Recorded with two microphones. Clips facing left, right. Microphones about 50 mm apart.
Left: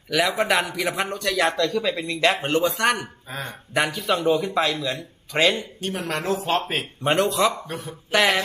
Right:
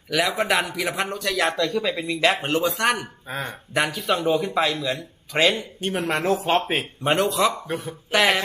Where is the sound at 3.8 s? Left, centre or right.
Centre.